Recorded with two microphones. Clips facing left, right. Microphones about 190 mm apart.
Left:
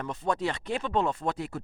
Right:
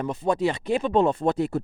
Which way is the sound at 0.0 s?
10° right (ahead or behind).